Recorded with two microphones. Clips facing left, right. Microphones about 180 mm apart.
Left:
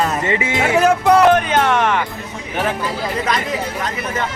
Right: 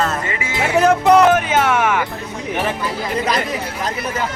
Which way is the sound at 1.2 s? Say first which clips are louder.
Left 1 dB; 5° right (ahead or behind).